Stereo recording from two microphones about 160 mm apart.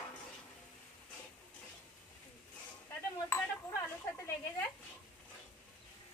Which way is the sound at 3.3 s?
15° left (ahead or behind).